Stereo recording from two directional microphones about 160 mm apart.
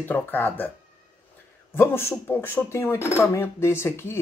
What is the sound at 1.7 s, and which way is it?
Speech, 15° left (ahead or behind).